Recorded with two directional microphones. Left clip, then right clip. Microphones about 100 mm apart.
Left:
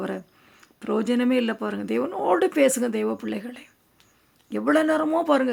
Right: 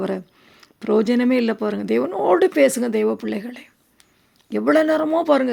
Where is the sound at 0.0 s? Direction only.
30° right (ahead or behind).